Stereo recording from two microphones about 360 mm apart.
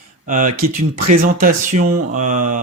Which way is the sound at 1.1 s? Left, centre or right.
Right.